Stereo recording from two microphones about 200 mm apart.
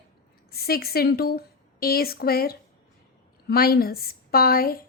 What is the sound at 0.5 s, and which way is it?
A woman's voice, 50° left (ahead or behind).